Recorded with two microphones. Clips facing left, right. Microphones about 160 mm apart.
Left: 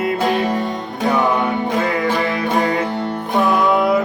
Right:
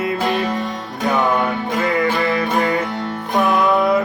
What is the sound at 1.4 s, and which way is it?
Music, 20° left (ahead or behind).